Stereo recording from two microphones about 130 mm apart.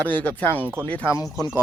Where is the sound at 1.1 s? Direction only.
30° left (ahead or behind).